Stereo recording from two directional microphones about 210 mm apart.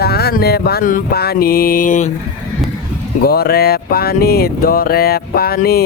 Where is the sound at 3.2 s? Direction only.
45° left (ahead or behind).